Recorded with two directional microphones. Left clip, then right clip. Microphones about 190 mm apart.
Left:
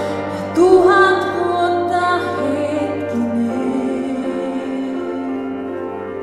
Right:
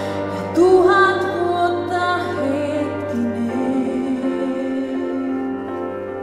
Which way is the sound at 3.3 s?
20° right (ahead or behind).